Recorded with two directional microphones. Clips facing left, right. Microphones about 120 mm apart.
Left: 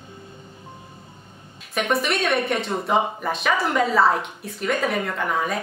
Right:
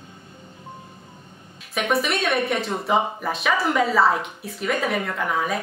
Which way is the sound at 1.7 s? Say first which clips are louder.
Even; centre (ahead or behind).